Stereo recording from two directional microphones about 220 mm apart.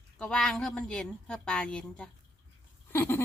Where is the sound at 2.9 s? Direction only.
10° left (ahead or behind).